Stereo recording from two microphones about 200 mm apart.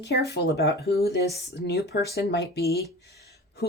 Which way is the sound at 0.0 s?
55° left (ahead or behind).